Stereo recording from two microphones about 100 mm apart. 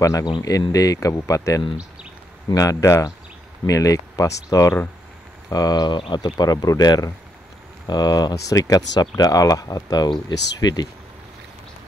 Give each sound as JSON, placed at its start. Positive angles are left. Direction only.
{"t": 0.0, "sound": "speech", "side_deg": 30}